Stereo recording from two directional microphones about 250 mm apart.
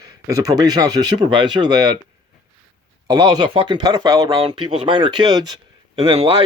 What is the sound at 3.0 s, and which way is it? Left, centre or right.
Speech, centre.